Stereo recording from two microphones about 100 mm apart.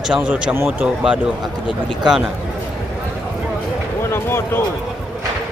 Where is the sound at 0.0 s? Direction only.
10° right (ahead or behind).